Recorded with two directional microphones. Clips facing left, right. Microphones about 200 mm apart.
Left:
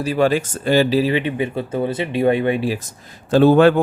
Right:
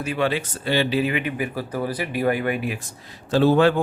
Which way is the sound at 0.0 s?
40° left (ahead or behind).